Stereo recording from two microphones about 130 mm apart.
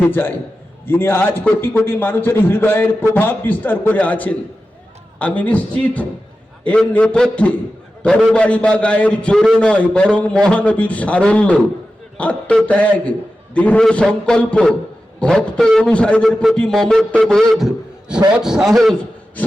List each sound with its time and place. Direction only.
0.0 s a man's voice: 15° left (ahead or behind); by 18.9 s centre (ahead or behind)